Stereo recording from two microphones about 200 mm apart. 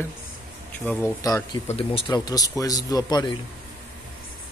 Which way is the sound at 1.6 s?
30° left (ahead or behind).